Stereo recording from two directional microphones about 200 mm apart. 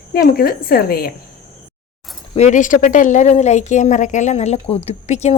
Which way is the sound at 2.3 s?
35° left (ahead or behind).